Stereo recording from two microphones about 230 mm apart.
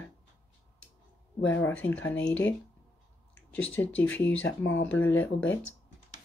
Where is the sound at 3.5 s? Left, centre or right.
Centre.